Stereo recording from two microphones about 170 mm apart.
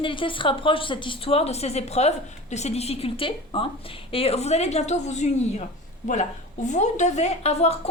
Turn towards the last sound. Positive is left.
turn(degrees=40)  # may be behind; listen again after turning